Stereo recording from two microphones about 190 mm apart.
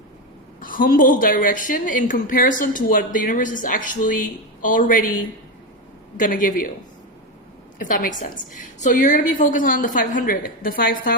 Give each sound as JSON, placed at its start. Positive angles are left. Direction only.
{"t": 0.6, "sound": "a woman's voice", "side_deg": 45}
{"t": 6.1, "sound": "a woman's voice", "side_deg": 45}
{"t": 7.8, "sound": "a woman's voice", "side_deg": 45}